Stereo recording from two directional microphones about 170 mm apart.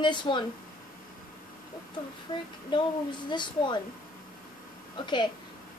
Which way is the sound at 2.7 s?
25° left (ahead or behind).